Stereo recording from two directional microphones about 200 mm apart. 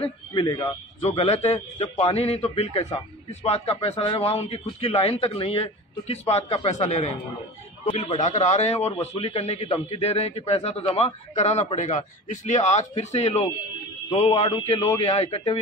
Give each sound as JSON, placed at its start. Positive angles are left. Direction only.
{"t": 0.0, "sound": "speech", "side_deg": 20}
{"t": 1.0, "sound": "a man's voice", "side_deg": 30}